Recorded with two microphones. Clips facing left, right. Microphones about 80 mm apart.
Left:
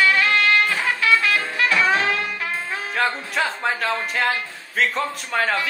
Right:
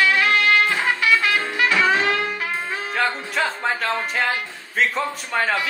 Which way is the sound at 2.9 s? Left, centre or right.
Centre.